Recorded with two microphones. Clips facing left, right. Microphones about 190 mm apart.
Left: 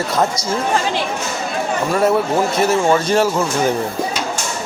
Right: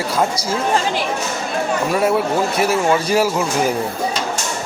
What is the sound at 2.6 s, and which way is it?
Speech, 5° right (ahead or behind).